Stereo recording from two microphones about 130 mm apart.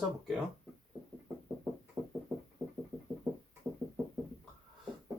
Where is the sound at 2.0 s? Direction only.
15° right (ahead or behind).